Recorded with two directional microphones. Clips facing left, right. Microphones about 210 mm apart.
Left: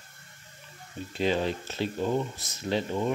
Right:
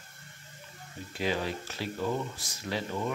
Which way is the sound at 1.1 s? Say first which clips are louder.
Left 4 dB; 25° left (ahead or behind).